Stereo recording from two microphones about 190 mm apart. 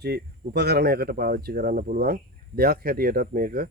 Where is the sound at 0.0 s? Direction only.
60° right (ahead or behind).